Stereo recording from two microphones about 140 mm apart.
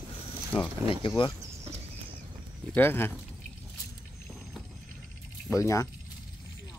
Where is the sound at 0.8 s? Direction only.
40° left (ahead or behind).